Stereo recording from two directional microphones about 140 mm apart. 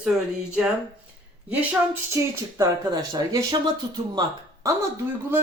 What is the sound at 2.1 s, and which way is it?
A man's voice, 25° right (ahead or behind).